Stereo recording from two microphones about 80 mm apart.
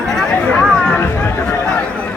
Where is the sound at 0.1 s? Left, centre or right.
Centre.